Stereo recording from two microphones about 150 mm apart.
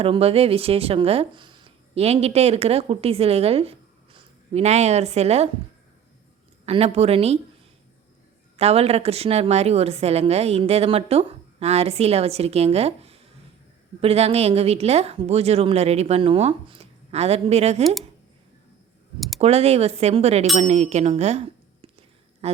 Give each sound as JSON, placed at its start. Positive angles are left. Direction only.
{"t": 0.0, "sound": "speech", "side_deg": -40}
{"t": 6.7, "sound": "a woman's voice", "side_deg": -40}
{"t": 8.5, "sound": "a woman's voice", "side_deg": -45}
{"t": 19.4, "sound": "a woman's voice", "side_deg": -45}